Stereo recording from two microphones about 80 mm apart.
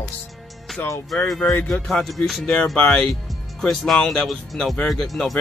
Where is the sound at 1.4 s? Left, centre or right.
Left.